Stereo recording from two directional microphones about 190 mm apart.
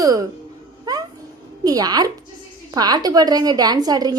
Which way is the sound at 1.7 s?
20° right (ahead or behind).